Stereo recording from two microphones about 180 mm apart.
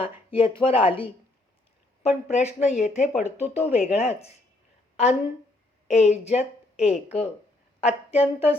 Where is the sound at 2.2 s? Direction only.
40° left (ahead or behind).